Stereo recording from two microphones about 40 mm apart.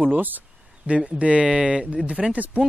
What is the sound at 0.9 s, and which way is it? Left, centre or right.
Speech, right.